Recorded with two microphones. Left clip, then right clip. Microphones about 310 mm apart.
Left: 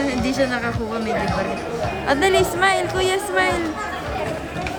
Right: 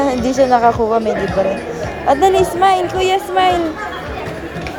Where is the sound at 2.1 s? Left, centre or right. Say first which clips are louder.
Right 6 dB; centre.